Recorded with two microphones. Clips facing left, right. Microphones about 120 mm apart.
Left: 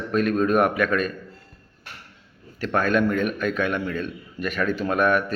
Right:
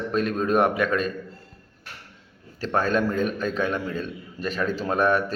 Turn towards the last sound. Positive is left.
turn(degrees=-35)  # may be behind; listen again after turning